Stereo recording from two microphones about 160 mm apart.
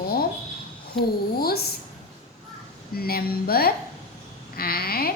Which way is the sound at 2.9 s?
70° left (ahead or behind).